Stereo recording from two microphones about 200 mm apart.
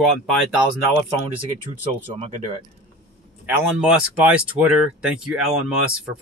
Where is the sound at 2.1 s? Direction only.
30° right (ahead or behind).